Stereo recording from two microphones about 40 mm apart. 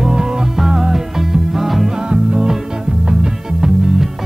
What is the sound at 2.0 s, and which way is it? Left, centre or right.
Music, right.